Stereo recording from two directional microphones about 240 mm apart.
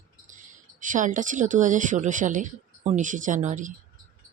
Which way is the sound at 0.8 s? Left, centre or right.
Right.